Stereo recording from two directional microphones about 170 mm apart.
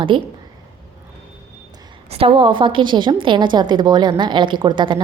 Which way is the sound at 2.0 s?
35° right (ahead or behind).